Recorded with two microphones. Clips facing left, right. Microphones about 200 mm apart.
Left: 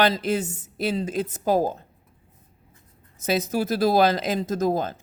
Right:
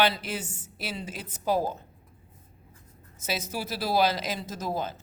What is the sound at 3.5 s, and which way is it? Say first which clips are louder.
Speech: left 9 dB; 45° left (ahead or behind).